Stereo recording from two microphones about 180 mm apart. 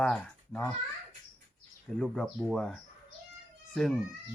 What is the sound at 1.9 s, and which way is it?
Speech, 5° left (ahead or behind).